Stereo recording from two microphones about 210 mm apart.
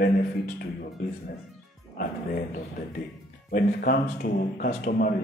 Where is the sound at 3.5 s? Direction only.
45° left (ahead or behind).